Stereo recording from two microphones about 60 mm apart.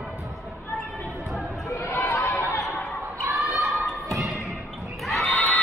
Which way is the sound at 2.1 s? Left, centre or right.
Left.